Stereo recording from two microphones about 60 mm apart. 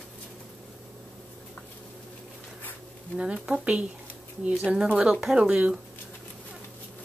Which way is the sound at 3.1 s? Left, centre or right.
Centre.